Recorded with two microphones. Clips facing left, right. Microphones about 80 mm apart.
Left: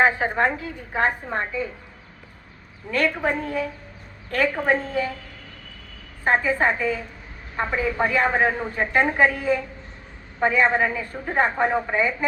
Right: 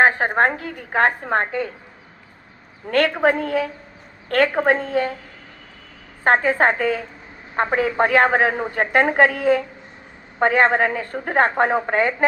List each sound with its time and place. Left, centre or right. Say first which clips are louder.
0.0 s a woman's voice: right 3 dB; right
2.9 s a woman's voice: right 5 dB; right
6.2 s a woman's voice: right 4 dB; right